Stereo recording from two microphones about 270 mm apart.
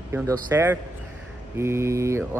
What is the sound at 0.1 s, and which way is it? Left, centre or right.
A man's voice, centre.